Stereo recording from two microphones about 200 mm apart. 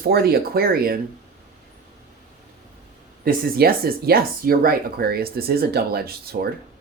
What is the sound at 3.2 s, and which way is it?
Speech, 50° right (ahead or behind).